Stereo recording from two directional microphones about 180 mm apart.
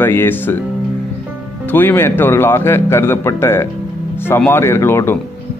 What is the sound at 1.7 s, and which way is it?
Speech, 10° left (ahead or behind).